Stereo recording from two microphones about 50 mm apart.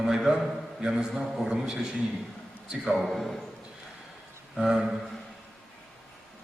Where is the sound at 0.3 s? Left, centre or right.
Centre.